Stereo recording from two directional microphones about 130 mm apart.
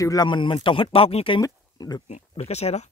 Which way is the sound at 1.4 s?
30° left (ahead or behind).